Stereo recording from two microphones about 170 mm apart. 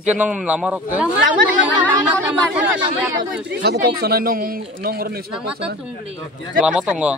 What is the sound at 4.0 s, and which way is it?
Speech, 60° right (ahead or behind).